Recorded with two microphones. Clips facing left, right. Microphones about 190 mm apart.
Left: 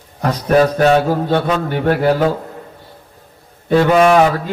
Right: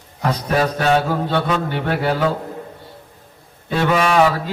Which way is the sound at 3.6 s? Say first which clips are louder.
Left 7 dB; 50° left (ahead or behind).